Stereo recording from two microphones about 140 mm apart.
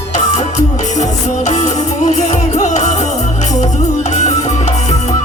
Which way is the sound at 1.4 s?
60° left (ahead or behind).